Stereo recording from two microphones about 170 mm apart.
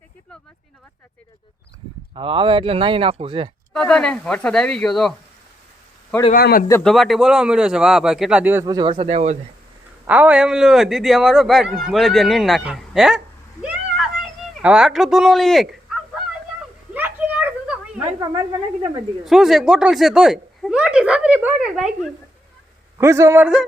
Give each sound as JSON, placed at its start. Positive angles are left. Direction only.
{"t": 2.1, "sound": "speech", "side_deg": -30}
{"t": 3.7, "sound": "speech", "side_deg": 5}
{"t": 6.3, "sound": "a man's voice", "side_deg": 60}
{"t": 6.8, "sound": "speech", "side_deg": 0}
{"t": 10.1, "sound": "speech", "side_deg": -5}
{"t": 16.9, "sound": "a sound", "side_deg": -10}
{"t": 18.0, "sound": "speech", "side_deg": -30}
{"t": 19.2, "sound": "speech", "side_deg": 0}
{"t": 23.0, "sound": "a man's voice", "side_deg": -15}